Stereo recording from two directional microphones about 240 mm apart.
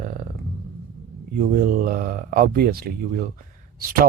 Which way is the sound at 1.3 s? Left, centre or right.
Right.